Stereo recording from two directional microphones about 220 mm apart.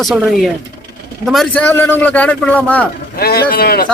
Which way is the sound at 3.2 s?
45° left (ahead or behind).